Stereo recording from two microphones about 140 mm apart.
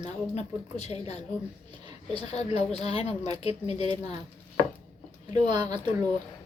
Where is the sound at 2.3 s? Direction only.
50° left (ahead or behind).